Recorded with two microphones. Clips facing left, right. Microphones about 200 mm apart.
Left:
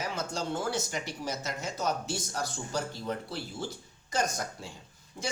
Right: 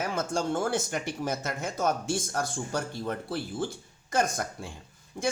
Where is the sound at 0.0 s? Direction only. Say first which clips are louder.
Right 5 dB; 50° right (ahead or behind).